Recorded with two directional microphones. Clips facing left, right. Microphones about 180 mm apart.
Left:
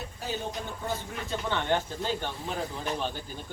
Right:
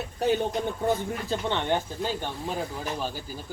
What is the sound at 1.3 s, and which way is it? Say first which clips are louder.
Speech: right 1 dB; 20° right (ahead or behind).